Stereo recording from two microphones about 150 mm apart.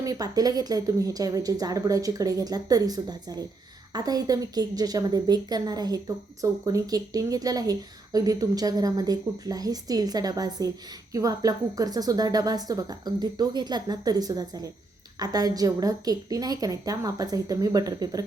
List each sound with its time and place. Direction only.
0.0 s a woman's voice: 25° right (ahead or behind)